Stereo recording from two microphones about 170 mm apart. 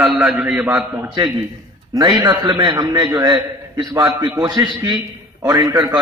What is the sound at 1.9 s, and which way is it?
A man's voice, 20° right (ahead or behind).